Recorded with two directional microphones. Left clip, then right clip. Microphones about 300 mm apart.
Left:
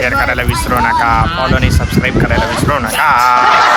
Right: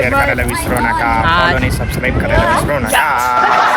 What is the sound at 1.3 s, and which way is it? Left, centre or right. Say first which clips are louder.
Speech: right 4 dB; centre.